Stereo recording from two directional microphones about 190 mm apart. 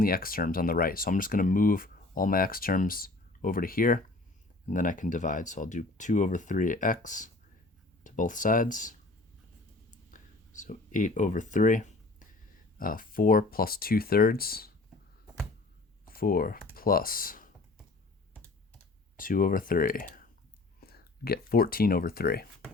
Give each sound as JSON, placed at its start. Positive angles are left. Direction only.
{"t": 0.0, "sound": "speech", "side_deg": 50}
{"t": 10.1, "sound": "speech", "side_deg": 40}
{"t": 16.0, "sound": "speech", "side_deg": 50}
{"t": 19.1, "sound": "speech", "side_deg": 45}